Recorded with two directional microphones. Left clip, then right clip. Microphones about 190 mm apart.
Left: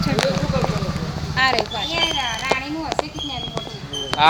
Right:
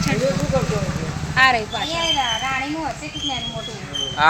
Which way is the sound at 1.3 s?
15° right (ahead or behind).